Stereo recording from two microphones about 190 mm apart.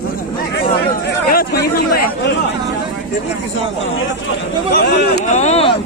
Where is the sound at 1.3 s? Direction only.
50° left (ahead or behind).